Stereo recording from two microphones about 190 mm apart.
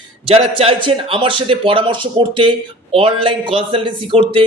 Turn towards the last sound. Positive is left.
turn(degrees=-25)  # may be behind; listen again after turning